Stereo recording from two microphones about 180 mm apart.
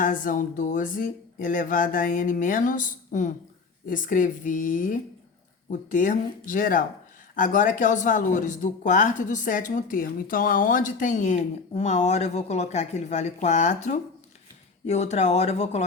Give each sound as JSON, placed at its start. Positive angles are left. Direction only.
{"t": 0.0, "sound": "speech", "side_deg": 50}